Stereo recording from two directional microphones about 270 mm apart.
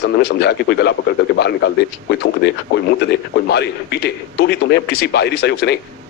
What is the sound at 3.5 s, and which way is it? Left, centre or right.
A man's voice, left.